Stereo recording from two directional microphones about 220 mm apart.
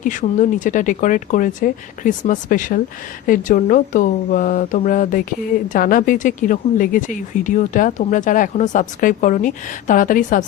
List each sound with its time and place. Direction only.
0.0 s speech: 35° left (ahead or behind)